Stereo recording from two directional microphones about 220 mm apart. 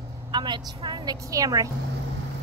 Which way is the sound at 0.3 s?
20° right (ahead or behind).